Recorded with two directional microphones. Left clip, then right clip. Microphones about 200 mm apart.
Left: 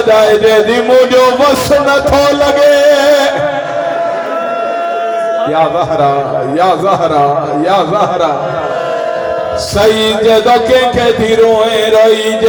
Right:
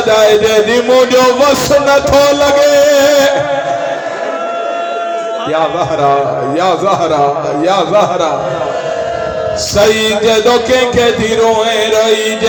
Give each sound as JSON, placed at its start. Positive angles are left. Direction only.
{"t": 0.1, "sound": "a man's voice", "side_deg": -25}
{"t": 6.6, "sound": "a man's voice", "side_deg": -25}
{"t": 10.2, "sound": "a man's voice", "side_deg": -25}